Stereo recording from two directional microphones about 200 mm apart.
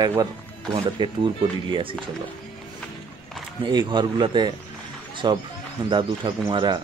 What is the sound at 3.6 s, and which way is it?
Speech, 20° right (ahead or behind).